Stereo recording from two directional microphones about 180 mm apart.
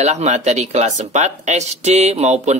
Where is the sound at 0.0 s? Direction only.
40° right (ahead or behind).